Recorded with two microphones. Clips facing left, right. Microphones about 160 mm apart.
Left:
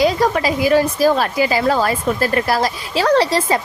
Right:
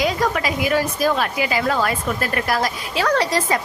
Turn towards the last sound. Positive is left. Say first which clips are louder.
# left 4 dB
turn(degrees=30)  # may be behind; listen again after turning